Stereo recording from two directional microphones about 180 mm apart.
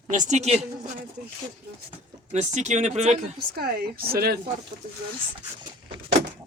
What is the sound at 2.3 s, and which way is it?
Speech, 40° right (ahead or behind).